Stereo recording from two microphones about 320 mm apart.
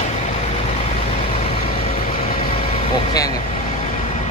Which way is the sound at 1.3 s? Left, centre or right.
Centre.